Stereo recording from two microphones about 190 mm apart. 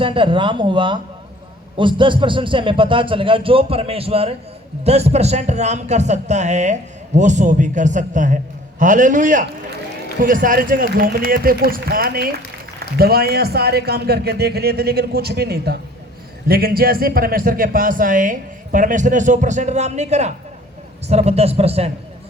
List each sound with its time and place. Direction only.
0.0 s a man's voice: 25° right (ahead or behind)